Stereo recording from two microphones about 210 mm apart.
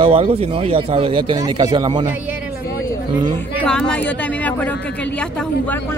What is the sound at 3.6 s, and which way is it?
Speech, 5° left (ahead or behind).